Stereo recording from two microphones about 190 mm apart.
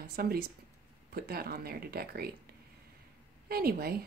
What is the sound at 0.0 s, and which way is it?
A woman's voice, 55° right (ahead or behind).